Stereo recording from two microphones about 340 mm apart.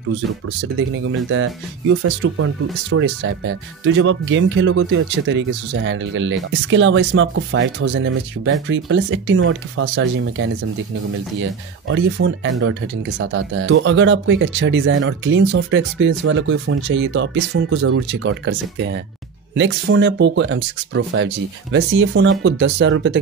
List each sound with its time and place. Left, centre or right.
0.7 s speech: right
11.9 s speech: right